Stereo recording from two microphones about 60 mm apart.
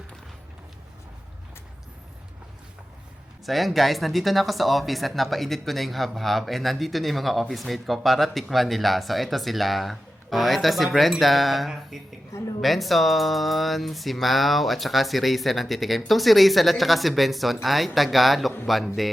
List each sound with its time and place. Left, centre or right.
3.4 s speech: centre